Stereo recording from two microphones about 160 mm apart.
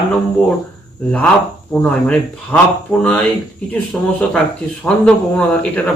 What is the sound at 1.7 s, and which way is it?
Speech, 10° left (ahead or behind).